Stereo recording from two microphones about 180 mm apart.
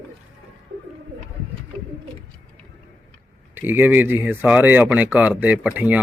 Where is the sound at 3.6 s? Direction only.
10° right (ahead or behind).